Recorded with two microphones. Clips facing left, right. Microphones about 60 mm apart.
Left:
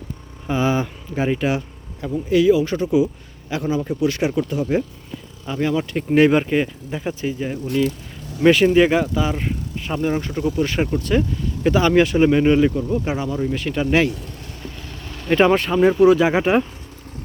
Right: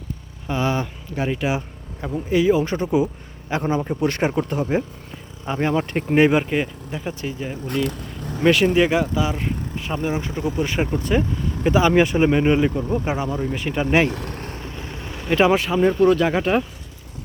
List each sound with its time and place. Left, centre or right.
0.4 s speech: centre
1.5 s speech: right
6.3 s speech: centre
7.9 s vehicle: right
8.4 s speech: centre
10.0 s speech: centre
12.7 s speech: right
14.1 s vehicle: right
14.6 s vehicle: right
15.3 s speech: centre
15.8 s speech: centre
16.3 s speech: centre